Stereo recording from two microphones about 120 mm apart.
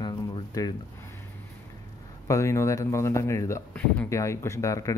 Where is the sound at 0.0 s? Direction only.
40° left (ahead or behind).